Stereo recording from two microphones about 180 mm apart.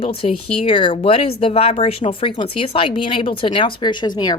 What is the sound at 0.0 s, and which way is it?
Speech, 30° left (ahead or behind).